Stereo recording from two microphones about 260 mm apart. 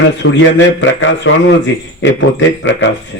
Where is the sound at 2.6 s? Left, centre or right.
Left.